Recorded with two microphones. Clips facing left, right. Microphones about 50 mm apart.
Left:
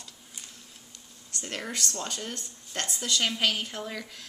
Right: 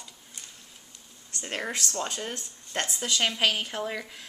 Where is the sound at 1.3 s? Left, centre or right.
Right.